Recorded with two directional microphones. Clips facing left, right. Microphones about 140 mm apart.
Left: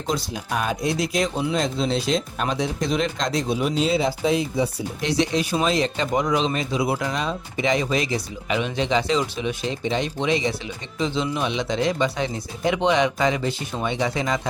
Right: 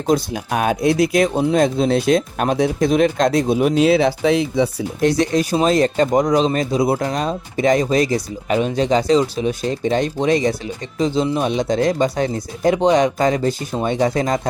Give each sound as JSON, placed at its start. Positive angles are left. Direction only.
{"t": 0.1, "sound": "speech", "side_deg": -60}
{"t": 4.9, "sound": "speech", "side_deg": -50}